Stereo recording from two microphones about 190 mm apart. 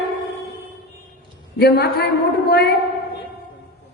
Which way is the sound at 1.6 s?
55° left (ahead or behind).